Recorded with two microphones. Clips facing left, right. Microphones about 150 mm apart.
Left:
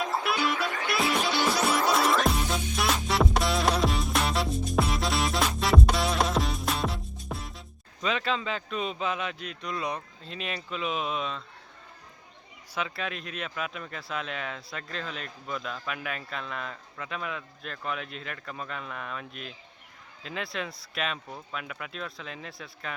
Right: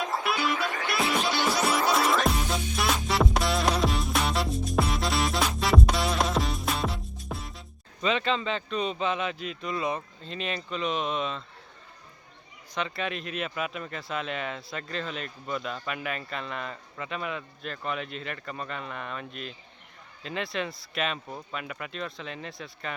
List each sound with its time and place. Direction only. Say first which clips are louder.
0.0 s music: even; centre (ahead or behind)
8.0 s speech: right 2 dB; centre (ahead or behind)
12.7 s speech: right 2 dB; centre (ahead or behind)